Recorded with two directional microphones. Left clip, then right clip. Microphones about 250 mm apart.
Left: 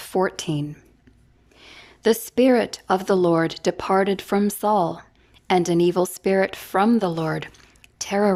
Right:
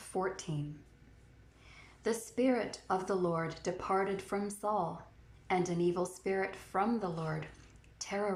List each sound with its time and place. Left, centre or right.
0.0 s speech: left
1.6 s a woman's voice: left
7.9 s a sound: left